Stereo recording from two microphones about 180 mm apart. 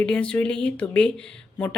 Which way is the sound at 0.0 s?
5° left (ahead or behind).